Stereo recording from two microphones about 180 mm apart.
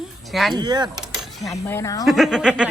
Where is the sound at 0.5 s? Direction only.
25° right (ahead or behind).